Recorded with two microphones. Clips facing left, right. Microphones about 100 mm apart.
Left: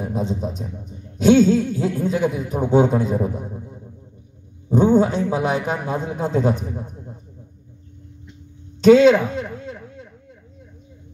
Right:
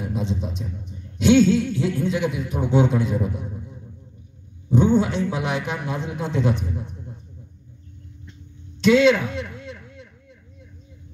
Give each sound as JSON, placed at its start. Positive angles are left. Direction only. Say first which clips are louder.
{"t": 0.0, "sound": "a man's voice", "louder": "left 3 dB", "side_deg": 40}
{"t": 8.8, "sound": "speech", "louder": "left 5 dB", "side_deg": 40}